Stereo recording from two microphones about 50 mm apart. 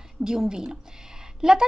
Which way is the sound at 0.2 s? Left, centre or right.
Centre.